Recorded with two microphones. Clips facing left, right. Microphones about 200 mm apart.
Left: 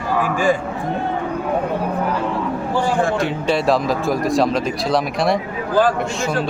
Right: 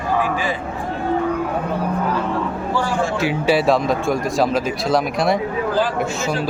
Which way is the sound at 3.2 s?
5° right (ahead or behind).